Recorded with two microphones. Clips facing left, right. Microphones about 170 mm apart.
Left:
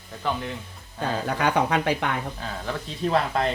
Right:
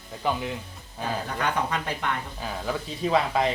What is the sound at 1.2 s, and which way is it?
Speech, 80° left.